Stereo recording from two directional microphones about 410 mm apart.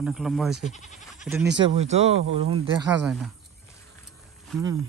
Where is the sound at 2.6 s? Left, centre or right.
Centre.